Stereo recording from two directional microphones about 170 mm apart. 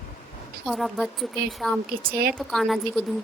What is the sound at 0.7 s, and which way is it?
Speech, centre (ahead or behind).